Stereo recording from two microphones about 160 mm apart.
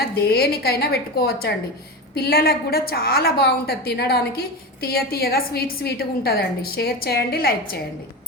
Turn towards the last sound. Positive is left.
turn(degrees=70)  # may be behind; listen again after turning